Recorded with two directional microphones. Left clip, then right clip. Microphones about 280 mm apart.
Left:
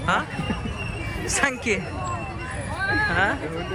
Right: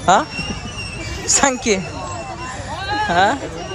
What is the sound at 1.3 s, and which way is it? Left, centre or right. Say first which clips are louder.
Speech: right 7 dB; centre.